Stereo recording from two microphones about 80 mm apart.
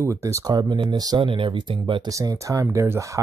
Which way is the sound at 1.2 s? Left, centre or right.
Right.